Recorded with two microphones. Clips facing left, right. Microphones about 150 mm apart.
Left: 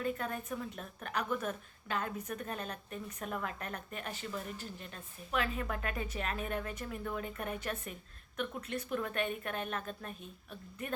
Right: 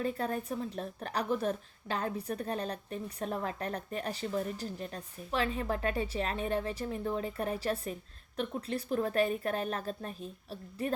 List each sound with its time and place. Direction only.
0.0 s a woman's voice: 35° right (ahead or behind)